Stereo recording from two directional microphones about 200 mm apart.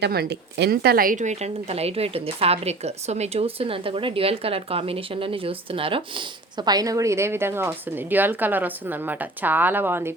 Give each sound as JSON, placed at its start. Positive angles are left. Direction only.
{"t": 0.0, "sound": "speech", "side_deg": -55}